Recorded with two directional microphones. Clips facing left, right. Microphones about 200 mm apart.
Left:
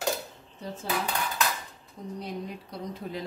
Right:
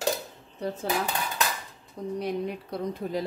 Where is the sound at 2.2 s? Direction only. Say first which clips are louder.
Right 6 dB; 65° right (ahead or behind).